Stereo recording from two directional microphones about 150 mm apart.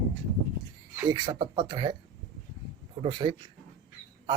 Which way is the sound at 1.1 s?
30° right (ahead or behind).